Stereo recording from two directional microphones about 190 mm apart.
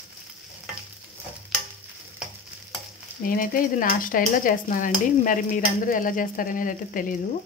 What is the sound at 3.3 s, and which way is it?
Speech, 50° left (ahead or behind).